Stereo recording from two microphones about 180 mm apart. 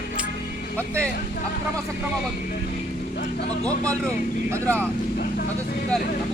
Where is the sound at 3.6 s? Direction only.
5° left (ahead or behind).